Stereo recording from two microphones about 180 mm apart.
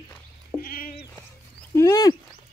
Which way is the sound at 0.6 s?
55° left (ahead or behind).